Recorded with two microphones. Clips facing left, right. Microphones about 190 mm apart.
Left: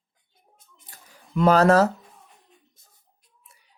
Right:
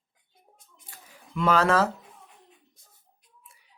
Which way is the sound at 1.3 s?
40° left (ahead or behind).